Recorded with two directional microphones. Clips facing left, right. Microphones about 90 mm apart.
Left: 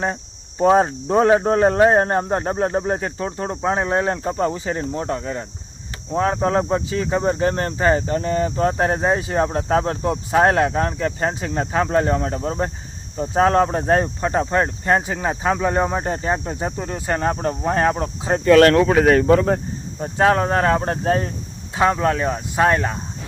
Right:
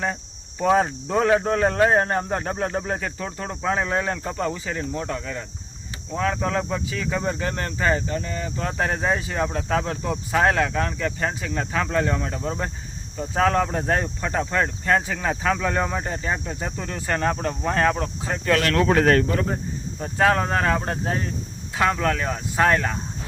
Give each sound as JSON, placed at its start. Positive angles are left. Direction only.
{"t": 0.6, "sound": "speech", "side_deg": 30}
{"t": 18.3, "sound": "speech", "side_deg": 35}
{"t": 18.9, "sound": "speech", "side_deg": 10}
{"t": 20.0, "sound": "speech", "side_deg": 25}
{"t": 21.8, "sound": "speech", "side_deg": 25}